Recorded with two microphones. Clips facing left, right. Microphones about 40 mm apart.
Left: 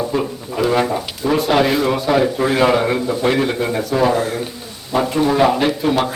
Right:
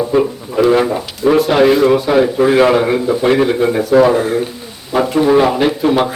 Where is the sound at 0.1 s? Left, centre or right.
Centre.